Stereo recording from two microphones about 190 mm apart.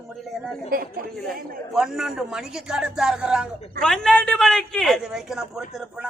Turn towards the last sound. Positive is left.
turn(degrees=-5)  # may be behind; listen again after turning